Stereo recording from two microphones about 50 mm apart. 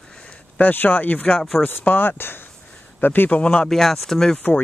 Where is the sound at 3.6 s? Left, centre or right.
Centre.